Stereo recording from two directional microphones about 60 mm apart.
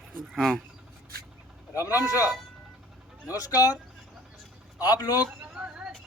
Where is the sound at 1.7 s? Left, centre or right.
Left.